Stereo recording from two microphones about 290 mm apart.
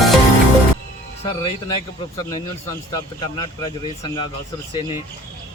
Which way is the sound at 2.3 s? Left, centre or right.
Centre.